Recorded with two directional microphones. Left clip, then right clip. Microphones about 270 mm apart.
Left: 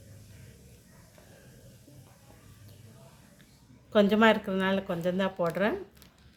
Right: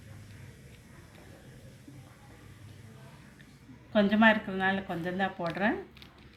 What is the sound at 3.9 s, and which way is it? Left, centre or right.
A woman's voice, left.